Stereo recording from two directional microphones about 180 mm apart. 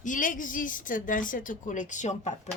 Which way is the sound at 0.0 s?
45° left (ahead or behind).